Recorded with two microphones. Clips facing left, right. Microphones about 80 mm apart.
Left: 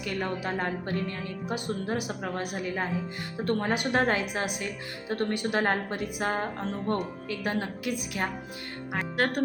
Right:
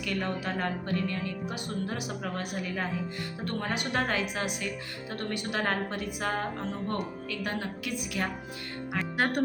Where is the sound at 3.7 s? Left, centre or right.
Left.